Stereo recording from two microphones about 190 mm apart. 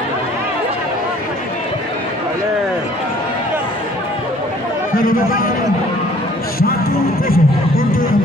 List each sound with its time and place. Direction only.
4.9 s speech: 50° left (ahead or behind)
7.3 s speech: 90° left